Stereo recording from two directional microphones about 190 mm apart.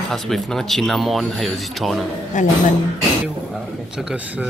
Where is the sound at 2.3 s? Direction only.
40° left (ahead or behind).